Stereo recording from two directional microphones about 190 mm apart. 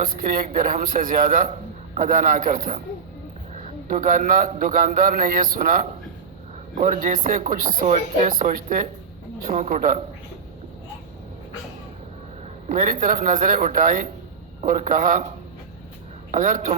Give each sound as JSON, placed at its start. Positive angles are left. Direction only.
{"t": 0.0, "sound": "a man's voice", "side_deg": -50}
{"t": 12.6, "sound": "a man's voice", "side_deg": -45}
{"t": 16.3, "sound": "a man's voice", "side_deg": -45}